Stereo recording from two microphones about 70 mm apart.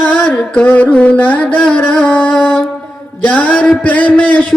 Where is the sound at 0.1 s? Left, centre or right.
Centre.